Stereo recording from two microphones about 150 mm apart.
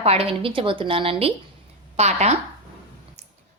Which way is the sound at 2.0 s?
45° right (ahead or behind).